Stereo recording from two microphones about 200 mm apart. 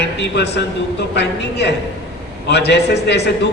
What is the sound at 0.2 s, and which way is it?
A man's voice, 55° left (ahead or behind).